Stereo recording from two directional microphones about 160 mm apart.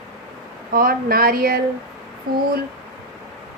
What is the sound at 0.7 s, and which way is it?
A woman's voice, 65° right (ahead or behind).